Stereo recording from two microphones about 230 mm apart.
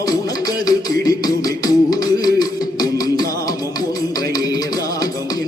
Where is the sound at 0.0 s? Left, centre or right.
Centre.